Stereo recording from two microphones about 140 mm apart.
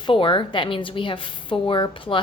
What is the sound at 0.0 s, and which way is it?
A woman's voice, 35° left (ahead or behind).